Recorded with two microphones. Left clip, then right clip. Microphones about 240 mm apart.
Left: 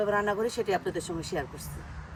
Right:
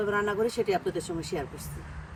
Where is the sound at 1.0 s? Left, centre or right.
Centre.